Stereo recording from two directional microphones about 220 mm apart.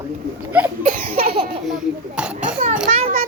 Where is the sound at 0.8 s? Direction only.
35° right (ahead or behind).